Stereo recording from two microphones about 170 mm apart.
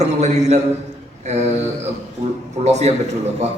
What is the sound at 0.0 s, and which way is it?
Speech, 40° right (ahead or behind).